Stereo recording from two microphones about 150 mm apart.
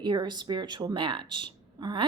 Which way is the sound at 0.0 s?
30° right (ahead or behind).